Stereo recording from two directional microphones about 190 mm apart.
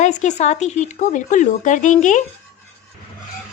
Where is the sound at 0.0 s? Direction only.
40° left (ahead or behind).